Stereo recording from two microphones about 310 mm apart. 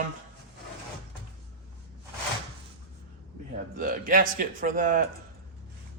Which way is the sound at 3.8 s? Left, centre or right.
Right.